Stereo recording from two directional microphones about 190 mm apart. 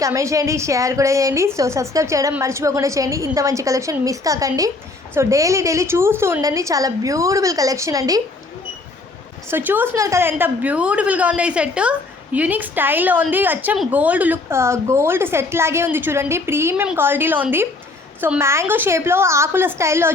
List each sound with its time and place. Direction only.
0.0 s a woman's voice: 15° right (ahead or behind)
9.5 s a woman's voice: 10° right (ahead or behind)